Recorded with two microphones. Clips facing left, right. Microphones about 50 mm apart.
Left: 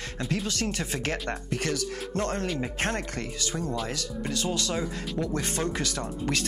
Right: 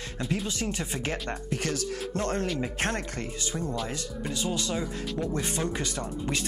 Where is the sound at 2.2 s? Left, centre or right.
Left.